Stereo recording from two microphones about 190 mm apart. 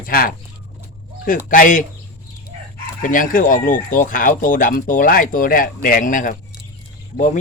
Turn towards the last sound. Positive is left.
turn(degrees=40)  # may be behind; listen again after turning